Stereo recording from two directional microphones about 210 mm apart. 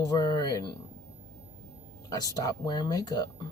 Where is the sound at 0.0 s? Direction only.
20° left (ahead or behind).